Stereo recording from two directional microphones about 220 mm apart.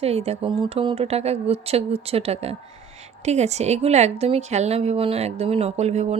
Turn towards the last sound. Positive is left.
turn(degrees=-30)  # may be behind; listen again after turning